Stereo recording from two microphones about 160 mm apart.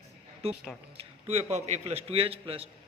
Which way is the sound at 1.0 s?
40° right (ahead or behind).